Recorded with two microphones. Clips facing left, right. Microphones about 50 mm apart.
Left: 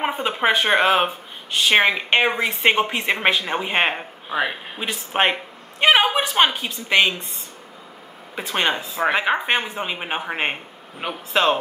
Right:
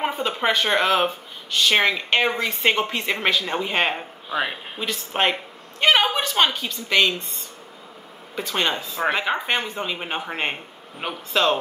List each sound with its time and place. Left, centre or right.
0.0 s speech: centre
4.4 s speech: centre
4.8 s speech: centre
8.4 s speech: centre
11.0 s speech: centre